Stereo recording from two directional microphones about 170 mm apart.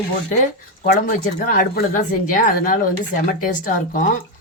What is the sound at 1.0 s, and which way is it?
Speech, 55° left (ahead or behind).